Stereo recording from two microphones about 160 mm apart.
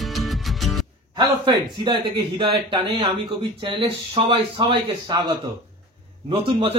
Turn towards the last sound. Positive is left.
turn(degrees=-35)  # may be behind; listen again after turning